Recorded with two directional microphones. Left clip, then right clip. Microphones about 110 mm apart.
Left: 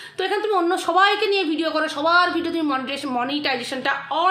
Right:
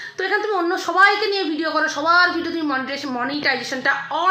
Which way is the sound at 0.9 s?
10° left (ahead or behind).